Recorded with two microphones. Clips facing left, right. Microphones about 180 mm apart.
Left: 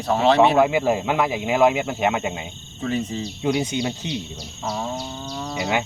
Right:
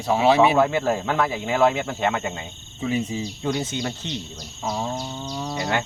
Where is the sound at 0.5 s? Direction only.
15° left (ahead or behind).